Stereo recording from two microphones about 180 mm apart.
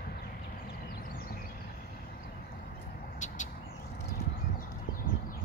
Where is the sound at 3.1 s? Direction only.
45° left (ahead or behind).